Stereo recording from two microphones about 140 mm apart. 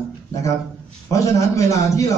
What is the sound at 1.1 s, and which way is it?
A man's voice, 25° left (ahead or behind).